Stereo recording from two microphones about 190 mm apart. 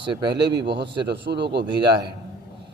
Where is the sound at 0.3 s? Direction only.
60° right (ahead or behind).